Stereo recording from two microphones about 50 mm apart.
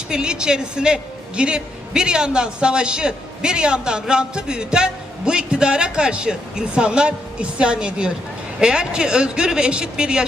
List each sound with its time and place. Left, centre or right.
0.1 s a man's voice: centre